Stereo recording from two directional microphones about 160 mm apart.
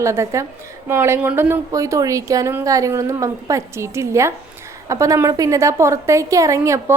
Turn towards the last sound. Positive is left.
turn(degrees=-20)  # may be behind; listen again after turning